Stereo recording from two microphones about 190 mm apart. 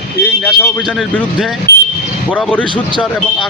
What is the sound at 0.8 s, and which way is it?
Speech, centre (ahead or behind).